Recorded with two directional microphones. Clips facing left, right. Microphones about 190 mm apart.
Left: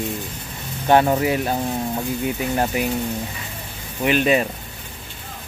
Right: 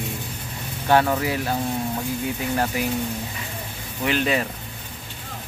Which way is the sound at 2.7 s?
20° left (ahead or behind).